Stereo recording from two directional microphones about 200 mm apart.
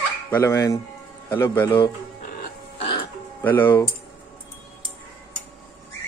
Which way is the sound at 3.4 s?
10° left (ahead or behind).